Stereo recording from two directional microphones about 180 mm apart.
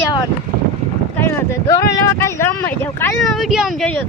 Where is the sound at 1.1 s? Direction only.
15° left (ahead or behind).